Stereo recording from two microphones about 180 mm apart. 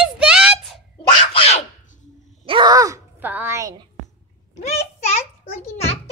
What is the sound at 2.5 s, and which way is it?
Wail, 25° right (ahead or behind).